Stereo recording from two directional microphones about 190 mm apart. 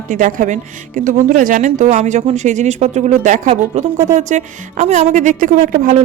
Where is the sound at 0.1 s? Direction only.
45° right (ahead or behind).